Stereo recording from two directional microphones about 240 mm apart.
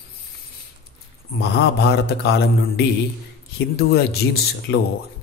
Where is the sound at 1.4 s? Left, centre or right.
Left.